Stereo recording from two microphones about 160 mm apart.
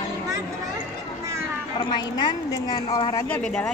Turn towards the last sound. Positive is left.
turn(degrees=5)  # may be behind; listen again after turning